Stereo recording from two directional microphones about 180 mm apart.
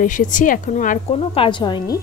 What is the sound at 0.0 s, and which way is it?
Speech, 45° left (ahead or behind).